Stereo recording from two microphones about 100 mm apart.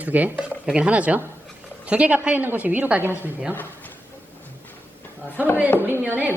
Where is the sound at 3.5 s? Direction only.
20° left (ahead or behind).